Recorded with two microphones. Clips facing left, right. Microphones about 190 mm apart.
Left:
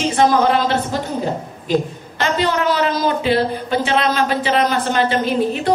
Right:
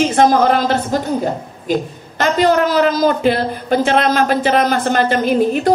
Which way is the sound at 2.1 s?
45° right (ahead or behind).